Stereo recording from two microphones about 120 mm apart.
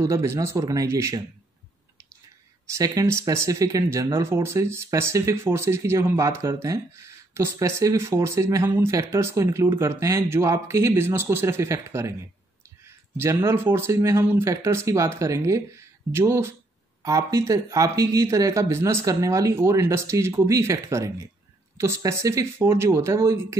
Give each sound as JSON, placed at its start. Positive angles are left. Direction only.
{"t": 0.0, "sound": "speech", "side_deg": -25}
{"t": 2.7, "sound": "speech", "side_deg": -30}